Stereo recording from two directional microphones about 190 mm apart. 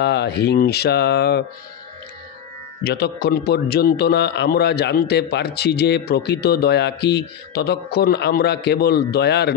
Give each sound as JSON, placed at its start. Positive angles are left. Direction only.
{"t": 0.0, "sound": "a man's voice", "side_deg": 60}
{"t": 2.8, "sound": "a man's voice", "side_deg": 60}